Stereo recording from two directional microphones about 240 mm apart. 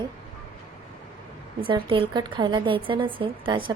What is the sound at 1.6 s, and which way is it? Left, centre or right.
A woman's voice, right.